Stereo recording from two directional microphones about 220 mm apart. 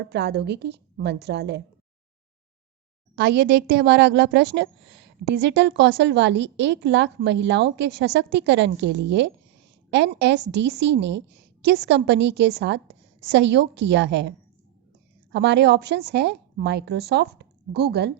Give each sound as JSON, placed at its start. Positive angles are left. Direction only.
{"t": 0.0, "sound": "a woman's voice", "side_deg": -50}
{"t": 3.2, "sound": "a woman's voice", "side_deg": -50}